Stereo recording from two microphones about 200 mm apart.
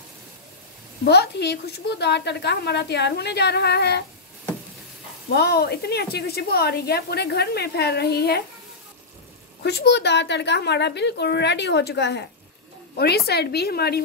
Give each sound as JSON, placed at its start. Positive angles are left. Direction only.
{"t": 1.0, "sound": "a woman's voice", "side_deg": 55}
{"t": 5.3, "sound": "a woman's voice", "side_deg": 55}
{"t": 9.6, "sound": "a woman's voice", "side_deg": 55}